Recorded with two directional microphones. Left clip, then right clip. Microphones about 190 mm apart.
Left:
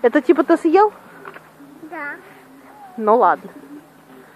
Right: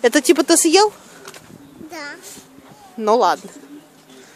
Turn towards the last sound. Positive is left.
turn(degrees=-30)  # may be behind; listen again after turning